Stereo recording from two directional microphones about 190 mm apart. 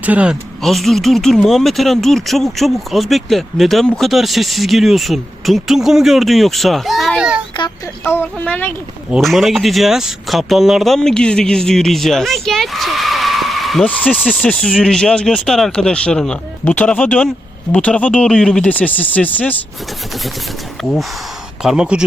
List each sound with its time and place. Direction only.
0.0 s speech: 5° right (ahead or behind)
7.6 s a sound: 25° left (ahead or behind)
8.0 s speech: 10° left (ahead or behind)
9.0 s speech: centre (ahead or behind)
20.8 s speech: centre (ahead or behind)